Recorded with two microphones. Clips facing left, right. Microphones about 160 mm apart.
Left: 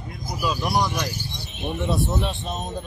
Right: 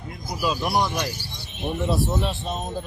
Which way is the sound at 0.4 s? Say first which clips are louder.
Even; 5° right (ahead or behind).